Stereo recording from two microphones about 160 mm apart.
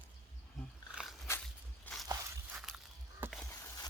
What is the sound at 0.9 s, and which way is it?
Dog, centre (ahead or behind).